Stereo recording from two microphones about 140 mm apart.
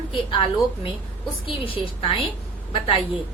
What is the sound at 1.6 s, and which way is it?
Speech, 35° left (ahead or behind).